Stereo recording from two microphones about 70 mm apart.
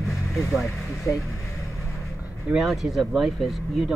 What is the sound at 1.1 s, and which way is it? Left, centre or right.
Speech, left.